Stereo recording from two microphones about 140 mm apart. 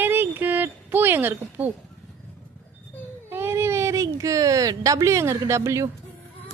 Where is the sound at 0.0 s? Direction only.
15° right (ahead or behind).